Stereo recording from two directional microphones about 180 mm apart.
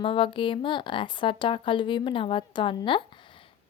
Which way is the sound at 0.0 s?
30° left (ahead or behind).